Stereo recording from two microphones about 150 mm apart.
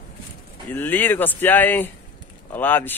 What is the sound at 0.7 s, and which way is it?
Speech, 15° left (ahead or behind).